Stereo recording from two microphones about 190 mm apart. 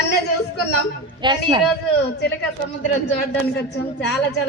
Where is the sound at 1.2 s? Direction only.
25° right (ahead or behind).